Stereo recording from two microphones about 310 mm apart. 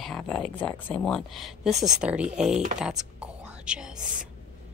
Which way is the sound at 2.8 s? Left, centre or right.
Centre.